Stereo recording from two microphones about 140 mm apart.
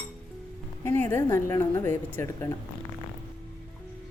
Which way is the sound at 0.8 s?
15° left (ahead or behind).